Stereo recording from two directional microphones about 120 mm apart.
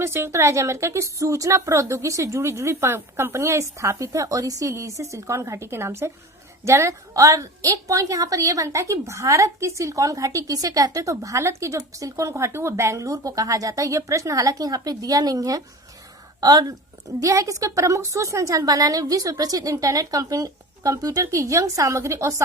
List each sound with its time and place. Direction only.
0.0 s a woman's voice: 20° right (ahead or behind)